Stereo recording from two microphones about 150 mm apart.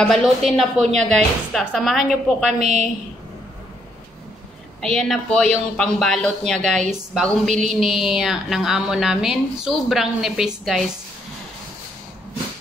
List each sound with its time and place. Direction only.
0.0 s a man's voice: 5° left (ahead or behind)
2.6 s a woman's voice: 50° right (ahead or behind)
4.8 s a man's voice: 5° left (ahead or behind)